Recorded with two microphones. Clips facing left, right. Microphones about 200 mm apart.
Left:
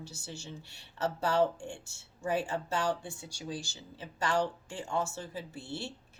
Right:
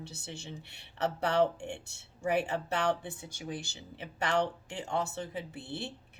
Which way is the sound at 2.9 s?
20° right (ahead or behind).